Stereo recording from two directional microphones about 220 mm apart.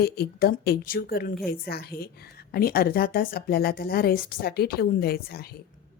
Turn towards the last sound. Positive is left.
turn(degrees=45)  # may be behind; listen again after turning